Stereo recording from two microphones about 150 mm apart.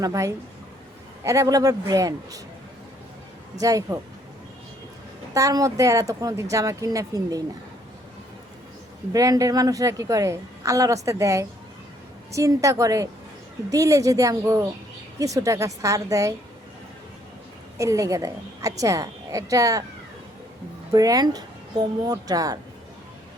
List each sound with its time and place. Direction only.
0.0 s a woman's voice: 20° right (ahead or behind)
3.6 s a woman's voice: 25° right (ahead or behind)
5.3 s a woman's voice: 20° right (ahead or behind)
9.1 s a woman's voice: 25° right (ahead or behind)
17.7 s a woman's voice: 20° right (ahead or behind)
20.9 s a woman's voice: 25° right (ahead or behind)